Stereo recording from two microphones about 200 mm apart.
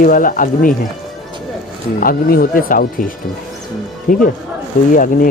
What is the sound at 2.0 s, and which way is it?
Speech, 45° left (ahead or behind).